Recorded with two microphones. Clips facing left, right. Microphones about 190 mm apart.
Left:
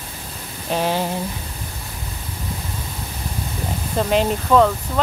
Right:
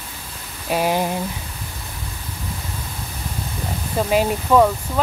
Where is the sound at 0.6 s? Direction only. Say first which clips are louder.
Right 1 dB; 10° right (ahead or behind).